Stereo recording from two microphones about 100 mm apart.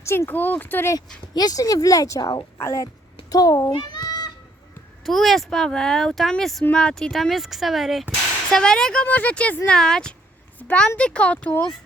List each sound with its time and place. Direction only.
0.0 s speech: 25° left (ahead or behind)
0.9 s a child's voice: 40° left (ahead or behind)
3.9 s goat: 40° left (ahead or behind)
5.0 s speech: centre (ahead or behind)